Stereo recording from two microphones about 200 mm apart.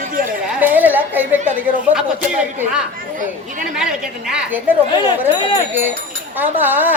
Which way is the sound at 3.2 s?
40° right (ahead or behind).